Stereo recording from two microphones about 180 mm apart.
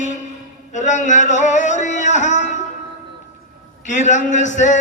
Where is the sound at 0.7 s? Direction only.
40° left (ahead or behind).